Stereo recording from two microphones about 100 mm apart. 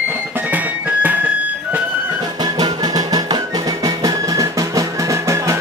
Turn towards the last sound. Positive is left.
turn(degrees=-30)  # may be behind; listen again after turning